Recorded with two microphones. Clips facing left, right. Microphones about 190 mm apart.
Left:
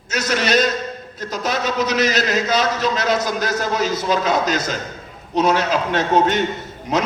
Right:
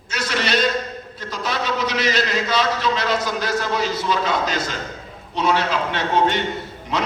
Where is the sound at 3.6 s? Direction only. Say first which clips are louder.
Left 2 dB; 45° left (ahead or behind).